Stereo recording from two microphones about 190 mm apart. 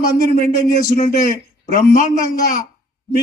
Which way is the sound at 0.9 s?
40° left (ahead or behind).